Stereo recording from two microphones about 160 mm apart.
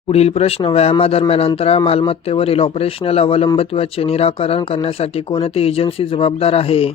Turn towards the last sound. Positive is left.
turn(degrees=35)  # may be behind; listen again after turning